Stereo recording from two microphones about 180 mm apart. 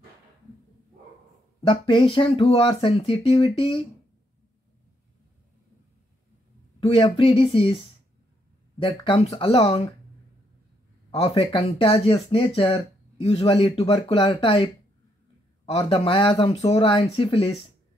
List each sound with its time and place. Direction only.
1.6 s speech: 25° left (ahead or behind)
6.8 s speech: 30° left (ahead or behind)
8.7 s speech: 30° left (ahead or behind)
11.1 s speech: 30° left (ahead or behind)
15.8 s speech: 30° left (ahead or behind)